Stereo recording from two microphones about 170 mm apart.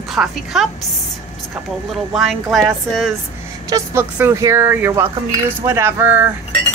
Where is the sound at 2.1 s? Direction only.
Centre (ahead or behind).